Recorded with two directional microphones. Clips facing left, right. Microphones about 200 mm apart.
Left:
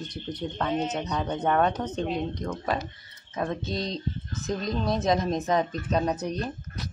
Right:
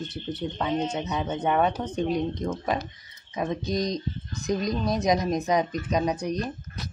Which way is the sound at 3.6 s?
30° left (ahead or behind).